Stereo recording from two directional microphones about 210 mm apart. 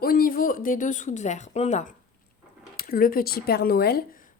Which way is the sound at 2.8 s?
45° left (ahead or behind).